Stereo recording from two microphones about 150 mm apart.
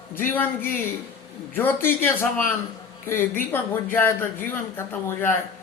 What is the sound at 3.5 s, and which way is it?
Speech, 15° left (ahead or behind).